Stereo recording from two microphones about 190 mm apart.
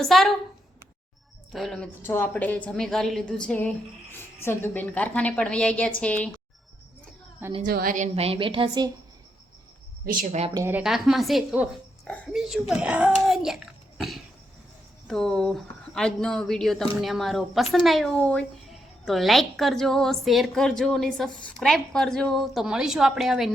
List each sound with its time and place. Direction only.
0.0 s speech: centre (ahead or behind)
1.5 s a woman's voice: centre (ahead or behind)
7.6 s a woman's voice: 50° right (ahead or behind); by 8.9 s 25° right (ahead or behind)
10.1 s a woman's voice: 45° right (ahead or behind)
10.5 s speech: 15° right (ahead or behind)
15.0 s speech: 5° left (ahead or behind)